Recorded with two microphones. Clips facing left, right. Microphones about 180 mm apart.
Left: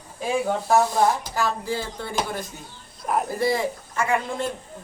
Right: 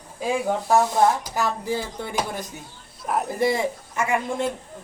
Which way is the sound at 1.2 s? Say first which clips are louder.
Even; 15° right (ahead or behind).